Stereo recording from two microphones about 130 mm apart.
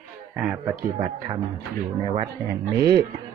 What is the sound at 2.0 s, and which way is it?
Speech, 50° right (ahead or behind).